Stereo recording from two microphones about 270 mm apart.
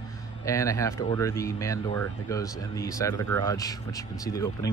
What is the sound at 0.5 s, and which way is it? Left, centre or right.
Speech, centre.